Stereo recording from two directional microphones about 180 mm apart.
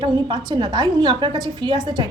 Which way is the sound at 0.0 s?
25° right (ahead or behind).